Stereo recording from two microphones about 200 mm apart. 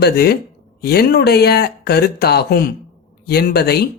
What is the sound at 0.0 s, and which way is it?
Speech, 50° left (ahead or behind).